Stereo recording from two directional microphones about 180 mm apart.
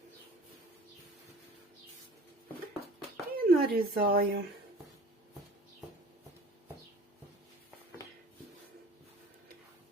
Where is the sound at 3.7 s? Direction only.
55° right (ahead or behind).